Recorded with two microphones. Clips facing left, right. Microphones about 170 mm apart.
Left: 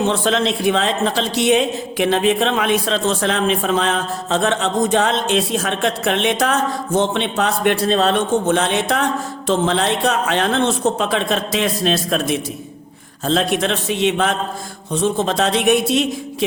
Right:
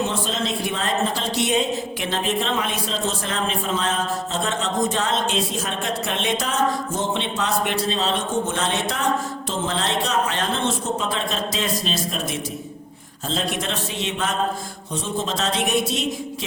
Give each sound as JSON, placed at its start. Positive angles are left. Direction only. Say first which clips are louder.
{"t": 0.1, "sound": "a man's voice", "louder": "left 7 dB", "side_deg": 75}